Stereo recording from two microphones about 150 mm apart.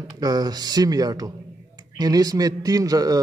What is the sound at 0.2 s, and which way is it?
A man's voice, 25° right (ahead or behind).